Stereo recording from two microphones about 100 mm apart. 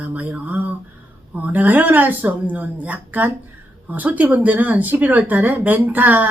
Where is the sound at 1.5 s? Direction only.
15° right (ahead or behind).